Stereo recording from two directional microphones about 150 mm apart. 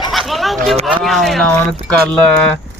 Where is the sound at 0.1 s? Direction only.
Centre (ahead or behind).